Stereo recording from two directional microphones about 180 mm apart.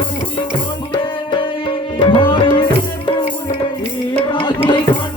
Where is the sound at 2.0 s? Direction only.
25° left (ahead or behind).